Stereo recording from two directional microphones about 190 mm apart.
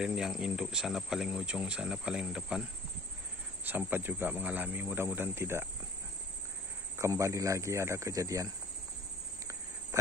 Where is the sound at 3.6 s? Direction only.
10° right (ahead or behind).